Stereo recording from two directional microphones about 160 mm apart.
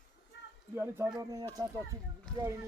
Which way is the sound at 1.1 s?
25° right (ahead or behind).